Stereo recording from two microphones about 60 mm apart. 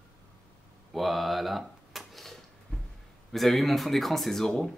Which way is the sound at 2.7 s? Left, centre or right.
Left.